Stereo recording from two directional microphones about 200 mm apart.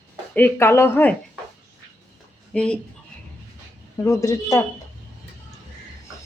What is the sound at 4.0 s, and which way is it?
Speech, 15° left (ahead or behind).